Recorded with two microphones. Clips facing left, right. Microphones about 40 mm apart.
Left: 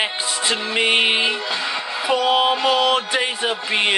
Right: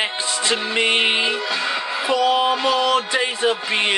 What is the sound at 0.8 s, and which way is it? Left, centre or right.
Music, centre.